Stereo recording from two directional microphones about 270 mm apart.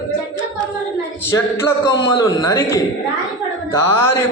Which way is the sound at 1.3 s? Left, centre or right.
Centre.